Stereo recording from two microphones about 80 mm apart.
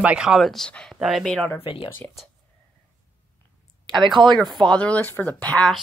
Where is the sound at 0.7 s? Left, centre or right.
Centre.